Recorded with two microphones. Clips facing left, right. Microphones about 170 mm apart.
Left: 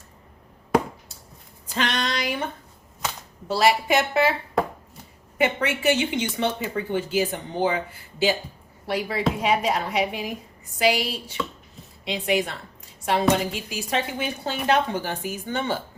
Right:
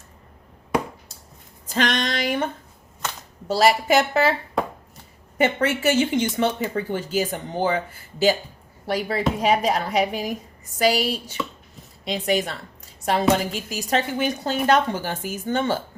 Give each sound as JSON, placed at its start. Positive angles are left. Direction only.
{"t": 1.6, "sound": "a sound", "side_deg": -45}
{"t": 3.5, "sound": "a woman's voice", "side_deg": -40}
{"t": 5.4, "sound": "speech", "side_deg": -45}
{"t": 8.9, "sound": "a woman's voice", "side_deg": -40}